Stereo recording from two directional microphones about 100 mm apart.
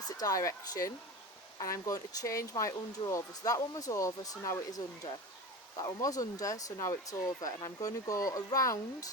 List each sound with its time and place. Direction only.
0.2 s speech: 35° left (ahead or behind)